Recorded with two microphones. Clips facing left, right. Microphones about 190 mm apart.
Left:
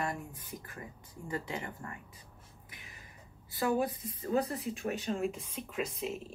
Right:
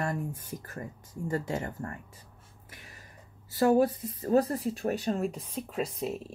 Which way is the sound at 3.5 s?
45° right (ahead or behind).